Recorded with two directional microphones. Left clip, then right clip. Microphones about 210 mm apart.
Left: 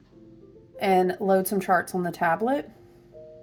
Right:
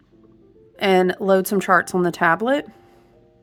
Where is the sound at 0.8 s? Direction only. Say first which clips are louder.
Right 4 dB; 30° right (ahead or behind).